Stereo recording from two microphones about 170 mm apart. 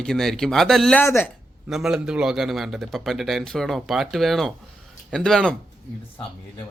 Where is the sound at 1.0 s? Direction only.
15° left (ahead or behind).